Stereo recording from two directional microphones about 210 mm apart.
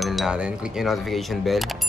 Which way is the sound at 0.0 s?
Centre (ahead or behind).